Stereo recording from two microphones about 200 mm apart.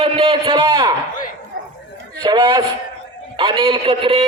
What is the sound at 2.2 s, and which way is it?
A man's voice, 20° right (ahead or behind).